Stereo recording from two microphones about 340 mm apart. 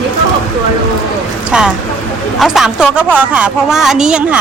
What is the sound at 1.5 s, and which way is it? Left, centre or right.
A woman's voice, centre.